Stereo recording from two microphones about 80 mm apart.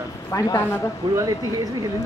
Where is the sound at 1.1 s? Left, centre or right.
Right.